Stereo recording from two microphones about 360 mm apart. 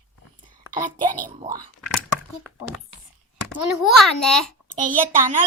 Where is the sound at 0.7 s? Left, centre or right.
Centre.